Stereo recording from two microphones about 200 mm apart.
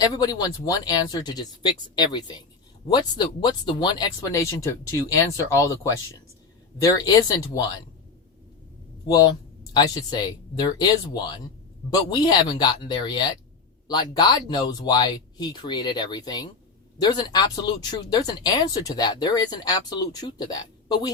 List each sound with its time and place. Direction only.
0.0 s speech: 20° left (ahead or behind)
7.0 s speech: 20° left (ahead or behind)
9.0 s speech: 20° left (ahead or behind)